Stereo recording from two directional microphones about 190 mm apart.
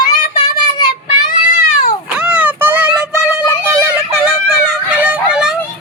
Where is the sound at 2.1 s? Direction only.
5° right (ahead or behind).